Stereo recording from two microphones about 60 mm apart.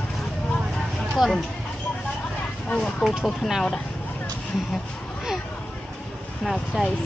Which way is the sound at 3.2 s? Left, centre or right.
Centre.